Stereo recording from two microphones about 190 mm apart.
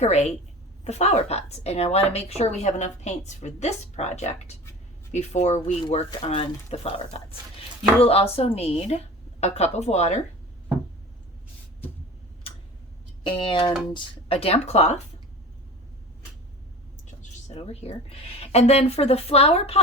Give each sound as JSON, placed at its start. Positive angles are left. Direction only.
{"t": 0.0, "sound": "a woman's voice", "side_deg": 35}
{"t": 13.2, "sound": "a woman's voice", "side_deg": 25}
{"t": 17.5, "sound": "a woman's voice", "side_deg": 30}